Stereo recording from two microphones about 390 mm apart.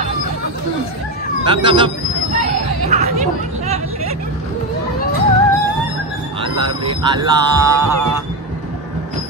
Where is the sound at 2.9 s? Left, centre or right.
Centre.